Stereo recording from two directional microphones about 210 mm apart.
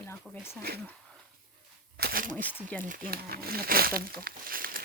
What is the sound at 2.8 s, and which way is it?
Speech, 40° right (ahead or behind).